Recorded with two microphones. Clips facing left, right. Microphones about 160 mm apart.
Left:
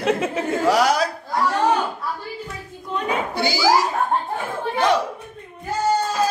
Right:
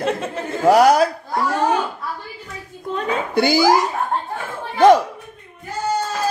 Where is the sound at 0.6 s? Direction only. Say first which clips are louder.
Right 7 dB; 50° right (ahead or behind).